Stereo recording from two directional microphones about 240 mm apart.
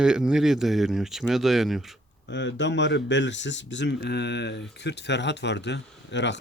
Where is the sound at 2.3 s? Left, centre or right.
Left.